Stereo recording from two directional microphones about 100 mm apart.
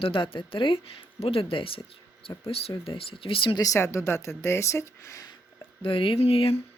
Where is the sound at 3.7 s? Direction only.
25° left (ahead or behind).